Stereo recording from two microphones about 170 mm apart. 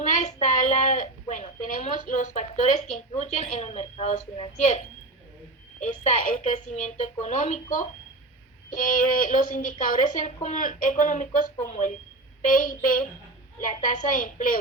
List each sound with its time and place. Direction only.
0.0 s a sound: 45° left (ahead or behind)
3.1 s a woman's voice: 40° left (ahead or behind)
5.8 s a woman's voice: 45° left (ahead or behind)